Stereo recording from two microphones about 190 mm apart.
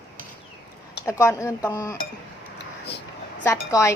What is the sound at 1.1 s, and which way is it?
Speech, 15° left (ahead or behind).